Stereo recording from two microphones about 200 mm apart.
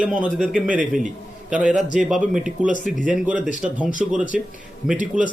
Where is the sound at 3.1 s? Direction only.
5° right (ahead or behind).